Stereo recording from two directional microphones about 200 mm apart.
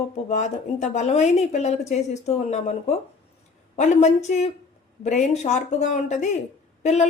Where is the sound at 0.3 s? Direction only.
35° left (ahead or behind).